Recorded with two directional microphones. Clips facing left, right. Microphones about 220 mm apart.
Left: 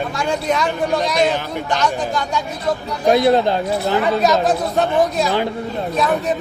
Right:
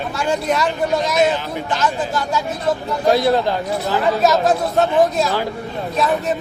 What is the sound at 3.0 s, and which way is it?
Speech, 20° left (ahead or behind).